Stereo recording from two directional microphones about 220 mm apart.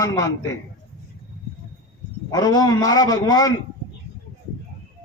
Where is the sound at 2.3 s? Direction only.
15° left (ahead or behind).